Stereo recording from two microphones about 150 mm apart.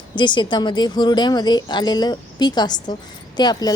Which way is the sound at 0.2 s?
30° left (ahead or behind).